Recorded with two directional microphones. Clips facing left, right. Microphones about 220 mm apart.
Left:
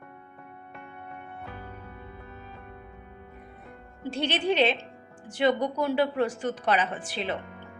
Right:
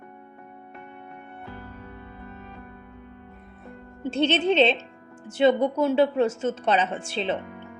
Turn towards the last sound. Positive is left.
turn(degrees=-25)  # may be behind; listen again after turning